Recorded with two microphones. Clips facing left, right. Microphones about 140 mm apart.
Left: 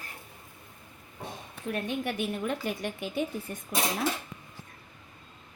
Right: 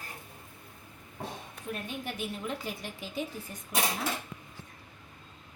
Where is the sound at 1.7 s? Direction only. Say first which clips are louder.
Left 6 dB; 65° left (ahead or behind).